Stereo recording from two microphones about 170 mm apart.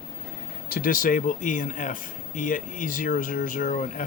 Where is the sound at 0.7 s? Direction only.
55° left (ahead or behind).